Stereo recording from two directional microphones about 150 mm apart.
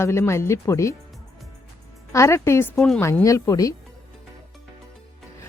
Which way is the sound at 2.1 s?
20° left (ahead or behind).